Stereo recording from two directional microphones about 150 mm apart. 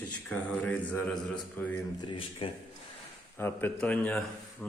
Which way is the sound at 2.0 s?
35° left (ahead or behind).